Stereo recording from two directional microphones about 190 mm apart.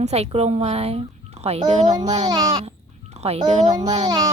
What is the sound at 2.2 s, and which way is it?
Speech, 20° right (ahead or behind).